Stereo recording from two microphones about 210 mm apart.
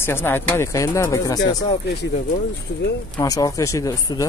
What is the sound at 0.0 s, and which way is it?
Speech, 10° left (ahead or behind).